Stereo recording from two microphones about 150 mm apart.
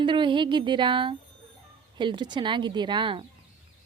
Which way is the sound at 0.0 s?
30° right (ahead or behind).